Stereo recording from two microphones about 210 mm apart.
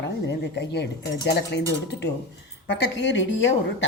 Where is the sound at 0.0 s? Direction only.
55° left (ahead or behind).